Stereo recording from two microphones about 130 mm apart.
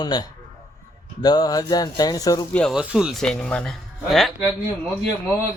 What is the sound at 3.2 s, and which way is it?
Speech, 5° left (ahead or behind).